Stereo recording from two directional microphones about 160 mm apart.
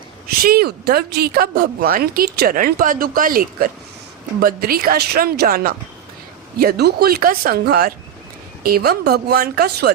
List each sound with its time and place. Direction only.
0.3 s a woman's voice: 70° right (ahead or behind)
6.6 s speech: 80° right